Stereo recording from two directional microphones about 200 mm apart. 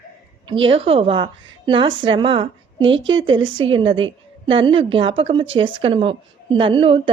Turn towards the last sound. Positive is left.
turn(degrees=-25)  # may be behind; listen again after turning